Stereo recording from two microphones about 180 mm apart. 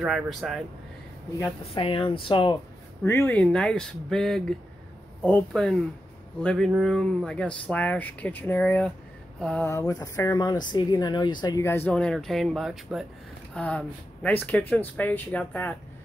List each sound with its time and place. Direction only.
0.0 s speech: centre (ahead or behind)
1.7 s speech: 30° left (ahead or behind)
3.1 s speech: 10° left (ahead or behind)
9.7 s speech: 20° left (ahead or behind)